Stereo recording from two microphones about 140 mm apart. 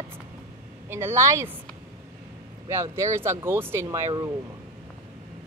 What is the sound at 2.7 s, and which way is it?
Speech, 20° right (ahead or behind).